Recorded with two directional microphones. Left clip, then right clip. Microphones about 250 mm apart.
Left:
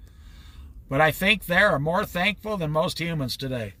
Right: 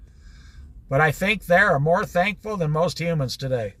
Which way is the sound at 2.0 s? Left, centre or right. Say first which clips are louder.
Right 2 dB; centre.